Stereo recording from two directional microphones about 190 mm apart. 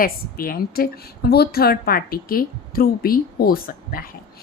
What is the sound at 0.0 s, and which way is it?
A woman's voice, 50° left (ahead or behind).